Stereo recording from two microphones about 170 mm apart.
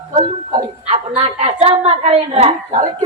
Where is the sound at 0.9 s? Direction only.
35° right (ahead or behind).